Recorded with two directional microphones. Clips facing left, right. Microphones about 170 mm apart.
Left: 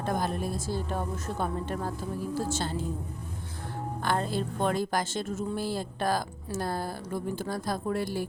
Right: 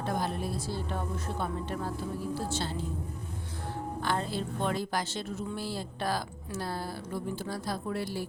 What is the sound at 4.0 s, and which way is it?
A woman's voice, 50° left (ahead or behind).